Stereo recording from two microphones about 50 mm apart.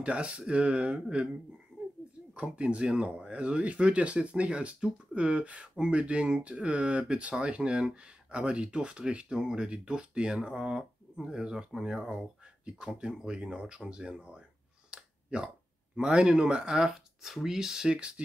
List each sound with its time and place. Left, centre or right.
0.0 s speech: right
2.3 s speech: right
15.0 s a sound: centre
16.0 s speech: centre